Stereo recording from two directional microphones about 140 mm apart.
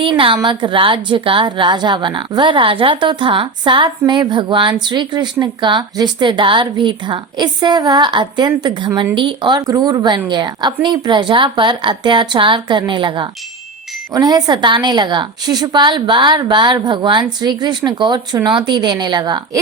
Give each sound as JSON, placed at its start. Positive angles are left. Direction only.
{"t": 0.0, "sound": "a woman's voice", "side_deg": -40}